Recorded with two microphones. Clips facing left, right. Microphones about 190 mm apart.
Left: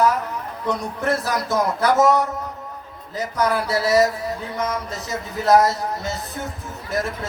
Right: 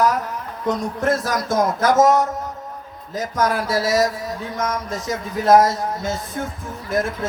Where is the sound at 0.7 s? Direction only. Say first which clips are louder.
Right 2 dB; 45° right (ahead or behind).